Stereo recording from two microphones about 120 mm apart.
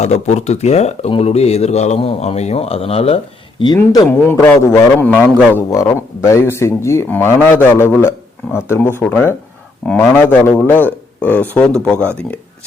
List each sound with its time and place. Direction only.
0.0 s speech: 70° left (ahead or behind); by 3.2 s 55° left (ahead or behind)
3.6 s speech: 35° left (ahead or behind)
4.3 s speech: 20° left (ahead or behind)
10.2 s speech: 15° left (ahead or behind)